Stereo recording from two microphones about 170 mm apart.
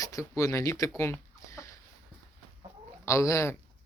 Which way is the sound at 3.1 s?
15° left (ahead or behind).